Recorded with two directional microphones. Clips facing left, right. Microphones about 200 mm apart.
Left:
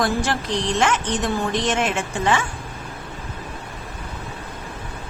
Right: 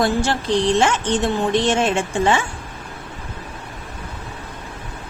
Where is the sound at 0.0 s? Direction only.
25° right (ahead or behind).